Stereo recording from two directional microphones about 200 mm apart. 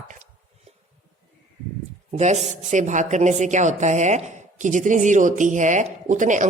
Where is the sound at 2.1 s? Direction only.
35° right (ahead or behind).